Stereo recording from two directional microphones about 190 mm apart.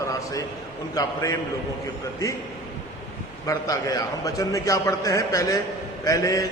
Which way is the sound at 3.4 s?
20° left (ahead or behind).